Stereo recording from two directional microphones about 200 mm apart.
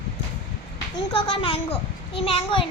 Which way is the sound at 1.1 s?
30° left (ahead or behind).